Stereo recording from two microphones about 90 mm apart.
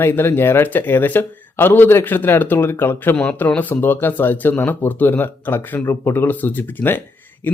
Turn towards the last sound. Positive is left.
turn(degrees=20)  # may be behind; listen again after turning